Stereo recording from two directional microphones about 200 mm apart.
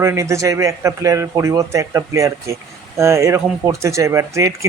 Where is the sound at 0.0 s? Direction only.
15° right (ahead or behind).